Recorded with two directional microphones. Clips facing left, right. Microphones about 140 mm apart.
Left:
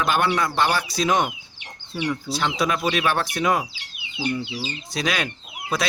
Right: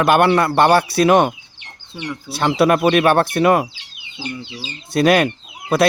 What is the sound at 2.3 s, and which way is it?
Speech, 60° right (ahead or behind).